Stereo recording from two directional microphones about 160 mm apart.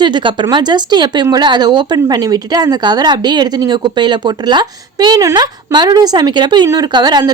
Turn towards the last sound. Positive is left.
turn(degrees=-25)  # may be behind; listen again after turning